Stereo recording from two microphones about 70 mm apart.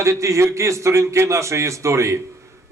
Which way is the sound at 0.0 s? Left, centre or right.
Right.